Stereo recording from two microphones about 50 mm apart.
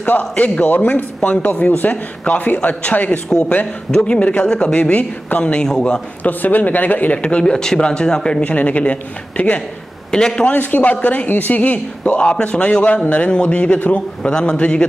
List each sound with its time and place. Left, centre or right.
0.0 s a man's voice: left
3.3 s speech: centre
6.2 s a man's voice: left; by 10.5 s centre
10.5 s speech: left
13.7 s a man's voice: left
14.2 s speech: centre